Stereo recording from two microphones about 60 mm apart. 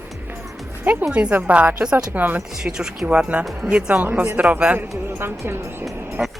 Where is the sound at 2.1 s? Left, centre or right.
Right.